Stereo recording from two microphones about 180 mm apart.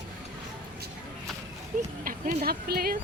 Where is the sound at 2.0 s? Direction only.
50° right (ahead or behind).